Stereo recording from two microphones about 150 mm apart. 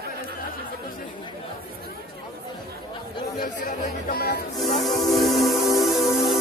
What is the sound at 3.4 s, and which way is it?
Speech, 70° left (ahead or behind).